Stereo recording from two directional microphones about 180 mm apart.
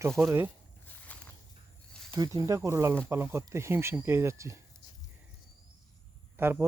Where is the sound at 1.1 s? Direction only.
10° left (ahead or behind).